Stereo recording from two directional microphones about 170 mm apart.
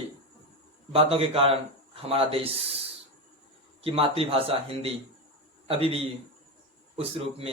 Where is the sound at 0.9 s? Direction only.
35° right (ahead or behind).